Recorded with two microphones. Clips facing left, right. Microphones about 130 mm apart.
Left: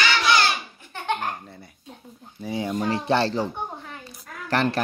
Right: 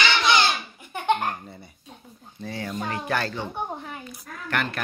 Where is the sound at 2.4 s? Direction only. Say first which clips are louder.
Left 5 dB; 15° left (ahead or behind).